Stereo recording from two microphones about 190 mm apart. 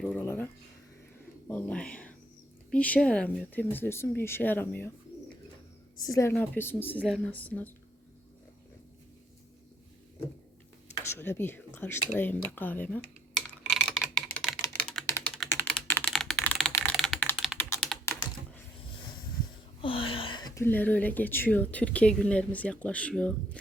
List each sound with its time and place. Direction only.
0.0 s a sound: 10° left (ahead or behind)
1.5 s speech: 10° left (ahead or behind)
6.1 s speech: 15° left (ahead or behind)
11.2 s speech: 10° left (ahead or behind)
12.5 s computer keyboard: 10° left (ahead or behind)
14.6 s typing: 10° left (ahead or behind)
18.0 s computer keyboard: 10° left (ahead or behind)
18.9 s a sound: 25° left (ahead or behind)
19.8 s speech: 30° left (ahead or behind); by 23.6 s 5° left (ahead or behind)